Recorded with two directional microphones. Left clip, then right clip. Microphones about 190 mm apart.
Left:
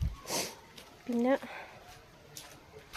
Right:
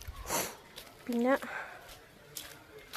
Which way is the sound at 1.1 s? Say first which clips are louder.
Even; 5° left (ahead or behind).